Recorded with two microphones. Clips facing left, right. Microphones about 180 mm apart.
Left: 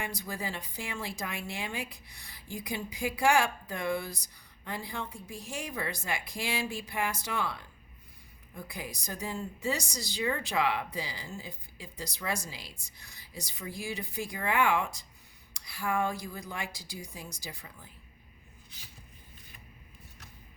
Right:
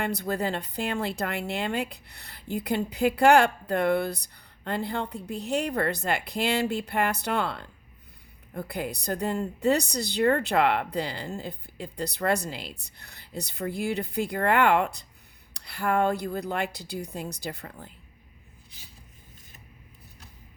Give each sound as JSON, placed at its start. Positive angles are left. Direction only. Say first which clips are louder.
{"t": 0.0, "sound": "a woman's voice", "louder": "right 9 dB", "side_deg": -65}